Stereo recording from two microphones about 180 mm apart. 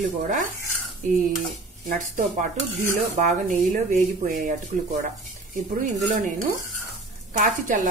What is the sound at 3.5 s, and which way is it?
Speech, 45° right (ahead or behind).